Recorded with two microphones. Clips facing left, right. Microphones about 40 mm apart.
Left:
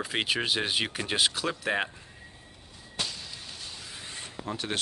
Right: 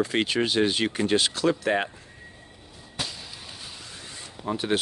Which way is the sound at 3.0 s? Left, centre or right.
Centre.